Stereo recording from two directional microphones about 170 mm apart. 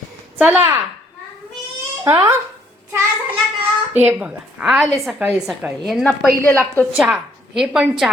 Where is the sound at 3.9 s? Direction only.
10° right (ahead or behind).